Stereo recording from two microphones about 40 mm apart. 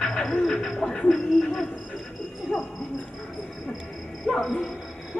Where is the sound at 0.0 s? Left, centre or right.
Centre.